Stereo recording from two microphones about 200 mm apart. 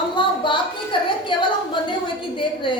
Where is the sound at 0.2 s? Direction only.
25° left (ahead or behind).